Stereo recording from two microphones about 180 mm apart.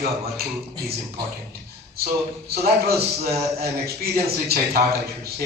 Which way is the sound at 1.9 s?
60° right (ahead or behind).